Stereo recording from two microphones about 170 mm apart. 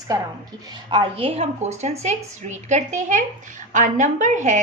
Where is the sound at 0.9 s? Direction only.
30° right (ahead or behind).